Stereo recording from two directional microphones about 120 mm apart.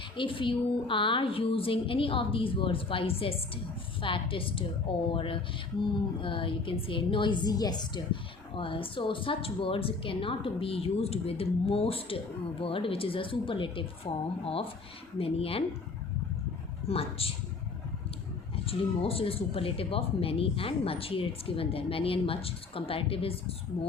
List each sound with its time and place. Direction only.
0.2 s a woman's voice: 45° left (ahead or behind)
16.9 s a woman's voice: 55° left (ahead or behind)
18.5 s a woman's voice: 50° left (ahead or behind)